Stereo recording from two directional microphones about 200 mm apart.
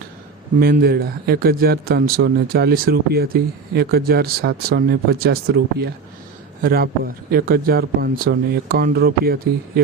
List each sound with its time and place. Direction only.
0.6 s a man's voice: 50° right (ahead or behind)
6.6 s a man's voice: 50° right (ahead or behind)